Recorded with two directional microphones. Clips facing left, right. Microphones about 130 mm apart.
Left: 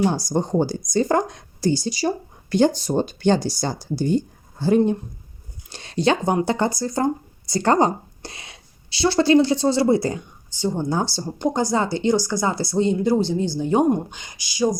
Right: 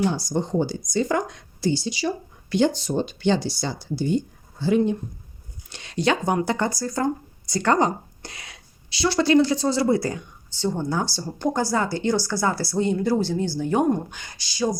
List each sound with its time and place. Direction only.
0.0 s speech: 45° left (ahead or behind); by 10.2 s 25° left (ahead or behind)
10.5 s speech: 15° left (ahead or behind)